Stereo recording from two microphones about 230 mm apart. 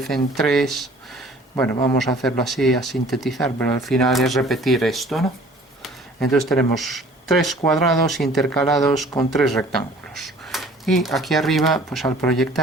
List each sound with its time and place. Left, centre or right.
0.0 s speech: centre
1.7 s a man's voice: centre
2.2 s speech: centre